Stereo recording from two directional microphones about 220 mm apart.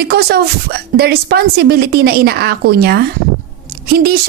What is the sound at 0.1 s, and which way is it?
A woman's voice, 45° right (ahead or behind).